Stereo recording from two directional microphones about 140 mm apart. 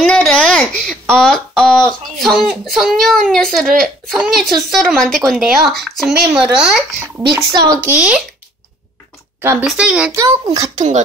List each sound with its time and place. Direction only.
0.0 s speech: 5° left (ahead or behind)
7.3 s a child's voice: 20° right (ahead or behind)
7.9 s a child's voice: 10° right (ahead or behind)
9.4 s speech: 15° right (ahead or behind)
9.7 s a child's voice: 5° right (ahead or behind)
10.1 s a child's voice: 25° right (ahead or behind)